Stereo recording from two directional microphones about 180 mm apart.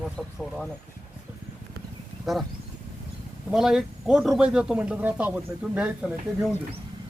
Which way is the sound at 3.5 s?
Centre (ahead or behind).